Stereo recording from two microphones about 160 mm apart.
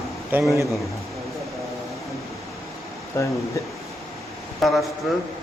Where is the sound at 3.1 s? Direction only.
20° left (ahead or behind).